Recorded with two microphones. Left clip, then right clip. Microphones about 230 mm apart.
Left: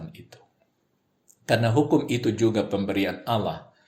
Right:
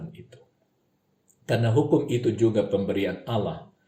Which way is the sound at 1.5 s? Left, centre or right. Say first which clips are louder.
Left 1 dB; left.